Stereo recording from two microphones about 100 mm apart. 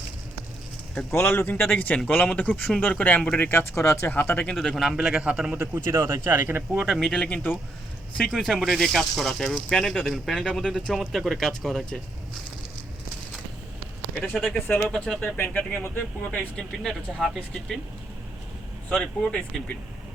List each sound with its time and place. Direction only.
1.1 s speech: 25° left (ahead or behind)
4.6 s speech: centre (ahead or behind)
5.5 s speech: 25° right (ahead or behind)
6.6 s speech: 5° right (ahead or behind)
14.2 s speech: 5° left (ahead or behind)
16.8 s speech: centre (ahead or behind)
18.9 s speech: 10° left (ahead or behind)